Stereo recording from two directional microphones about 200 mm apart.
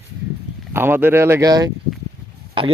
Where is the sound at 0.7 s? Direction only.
10° right (ahead or behind).